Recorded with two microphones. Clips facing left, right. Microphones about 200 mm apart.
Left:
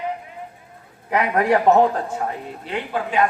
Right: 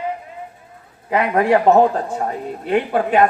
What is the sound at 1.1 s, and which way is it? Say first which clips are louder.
A man's voice: right 3 dB; 30° right (ahead or behind).